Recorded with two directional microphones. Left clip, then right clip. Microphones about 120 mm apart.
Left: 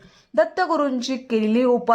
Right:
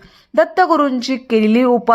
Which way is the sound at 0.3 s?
25° right (ahead or behind).